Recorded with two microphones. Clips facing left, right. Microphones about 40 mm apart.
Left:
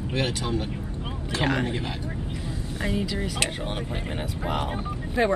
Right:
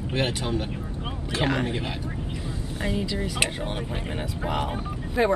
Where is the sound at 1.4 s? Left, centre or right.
Centre.